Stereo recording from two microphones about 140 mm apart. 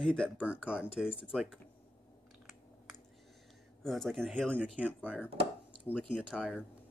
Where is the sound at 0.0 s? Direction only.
5° left (ahead or behind).